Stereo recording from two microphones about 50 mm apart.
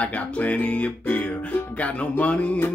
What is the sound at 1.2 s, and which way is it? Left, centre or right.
Music, left.